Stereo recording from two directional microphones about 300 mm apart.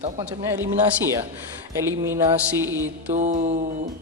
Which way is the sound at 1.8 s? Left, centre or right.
Centre.